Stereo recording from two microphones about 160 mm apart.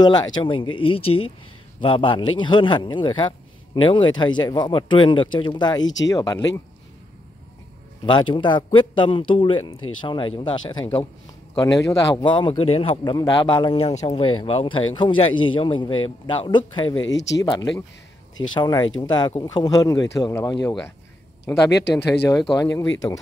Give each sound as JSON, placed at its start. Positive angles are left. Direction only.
{"t": 0.0, "sound": "a man's voice", "side_deg": 25}
{"t": 8.0, "sound": "a man's voice", "side_deg": 30}
{"t": 12.3, "sound": "a man's voice", "side_deg": 30}
{"t": 13.0, "sound": "a man's voice", "side_deg": 25}